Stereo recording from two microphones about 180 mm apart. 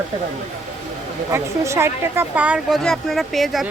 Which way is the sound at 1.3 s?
15° right (ahead or behind).